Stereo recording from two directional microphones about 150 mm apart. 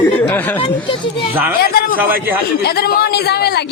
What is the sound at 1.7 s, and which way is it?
Speech, 75° left (ahead or behind).